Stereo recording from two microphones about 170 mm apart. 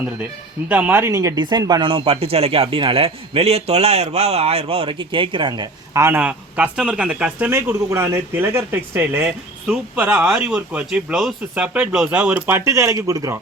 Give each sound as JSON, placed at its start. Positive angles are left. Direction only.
{"t": 0.7, "sound": "speech", "side_deg": -10}